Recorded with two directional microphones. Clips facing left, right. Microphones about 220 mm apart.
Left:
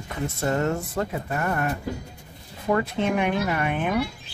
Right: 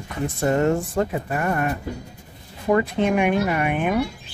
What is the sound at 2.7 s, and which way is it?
Speech, 15° right (ahead or behind).